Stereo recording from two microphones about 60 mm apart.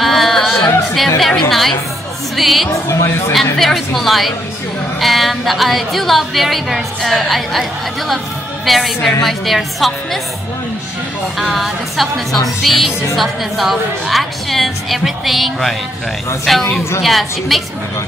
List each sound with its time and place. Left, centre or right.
0.0 s music: centre
0.9 s a woman's voice: centre
2.7 s speech: left
3.5 s a woman's voice: centre
8.6 s a woman's voice: centre
11.3 s a woman's voice: centre